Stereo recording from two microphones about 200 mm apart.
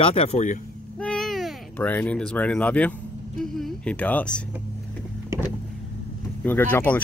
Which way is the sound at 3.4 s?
Centre (ahead or behind).